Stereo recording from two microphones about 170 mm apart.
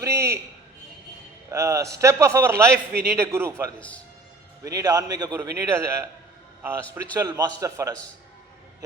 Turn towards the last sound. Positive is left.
turn(degrees=-20)  # may be behind; listen again after turning